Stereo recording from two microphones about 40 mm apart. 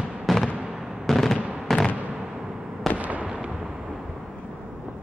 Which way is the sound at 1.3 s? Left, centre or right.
Right.